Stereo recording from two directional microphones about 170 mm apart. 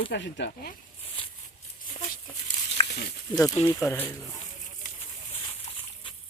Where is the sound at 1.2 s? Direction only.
30° left (ahead or behind).